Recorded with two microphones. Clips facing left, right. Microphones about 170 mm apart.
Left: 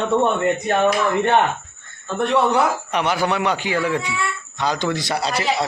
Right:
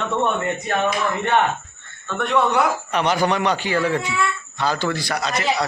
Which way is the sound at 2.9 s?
10° left (ahead or behind).